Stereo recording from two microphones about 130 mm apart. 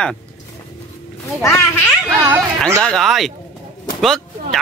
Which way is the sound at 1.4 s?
20° left (ahead or behind).